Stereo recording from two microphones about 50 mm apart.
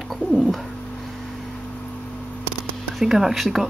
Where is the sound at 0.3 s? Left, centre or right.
Centre.